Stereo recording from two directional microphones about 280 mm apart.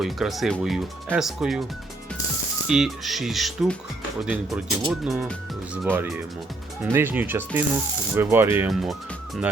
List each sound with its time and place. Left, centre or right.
0.0 s speech: centre
2.6 s speech: centre